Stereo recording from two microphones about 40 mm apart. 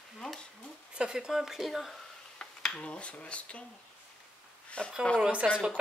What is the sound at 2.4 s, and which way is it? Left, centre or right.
Speech, left.